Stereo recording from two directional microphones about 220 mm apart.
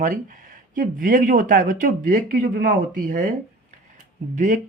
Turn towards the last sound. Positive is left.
turn(degrees=-35)  # may be behind; listen again after turning